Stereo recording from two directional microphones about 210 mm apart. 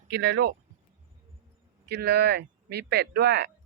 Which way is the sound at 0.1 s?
50° right (ahead or behind).